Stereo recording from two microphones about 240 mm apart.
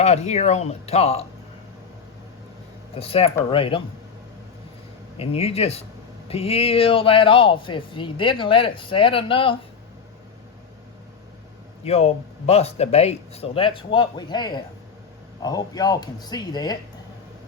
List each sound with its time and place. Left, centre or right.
0.0 s speech: left
2.9 s speech: left
5.1 s speech: left
11.9 s speech: left